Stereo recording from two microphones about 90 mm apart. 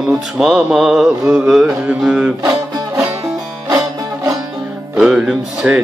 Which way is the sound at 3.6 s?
35° right (ahead or behind).